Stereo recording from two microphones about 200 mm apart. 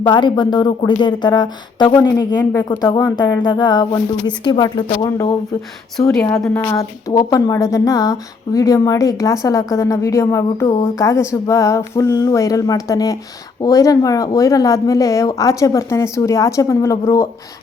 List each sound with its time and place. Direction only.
0.1 s a woman's voice: 20° left (ahead or behind)